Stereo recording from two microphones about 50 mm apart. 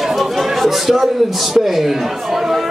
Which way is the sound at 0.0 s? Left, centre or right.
Centre.